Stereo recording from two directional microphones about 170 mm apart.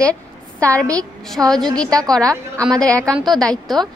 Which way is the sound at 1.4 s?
5° right (ahead or behind).